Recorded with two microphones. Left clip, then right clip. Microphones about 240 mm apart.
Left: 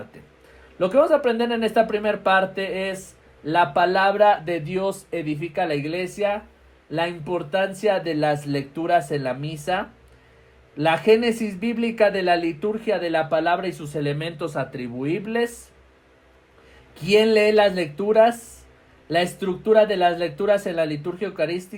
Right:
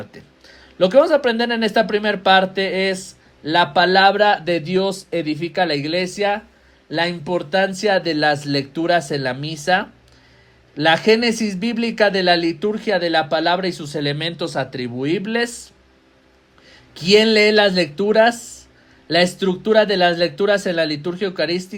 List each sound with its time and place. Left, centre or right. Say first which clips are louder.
0.8 s speech: right 4 dB; right
16.9 s speech: right 4 dB; right